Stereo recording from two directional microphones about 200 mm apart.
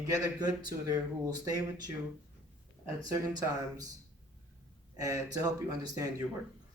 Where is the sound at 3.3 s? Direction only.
20° right (ahead or behind).